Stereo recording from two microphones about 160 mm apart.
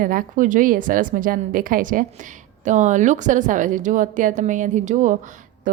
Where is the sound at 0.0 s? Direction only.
60° right (ahead or behind).